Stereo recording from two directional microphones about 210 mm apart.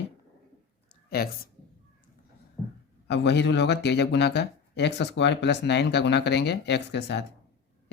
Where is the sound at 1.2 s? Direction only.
45° left (ahead or behind).